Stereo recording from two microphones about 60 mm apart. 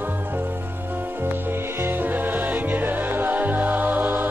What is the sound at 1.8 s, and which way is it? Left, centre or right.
Music, right.